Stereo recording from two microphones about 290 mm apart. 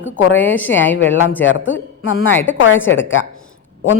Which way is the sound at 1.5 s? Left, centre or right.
Left.